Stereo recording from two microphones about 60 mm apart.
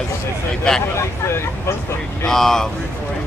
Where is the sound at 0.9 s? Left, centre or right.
Left.